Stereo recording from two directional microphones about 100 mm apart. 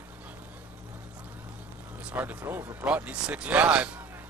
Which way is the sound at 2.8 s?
10° right (ahead or behind).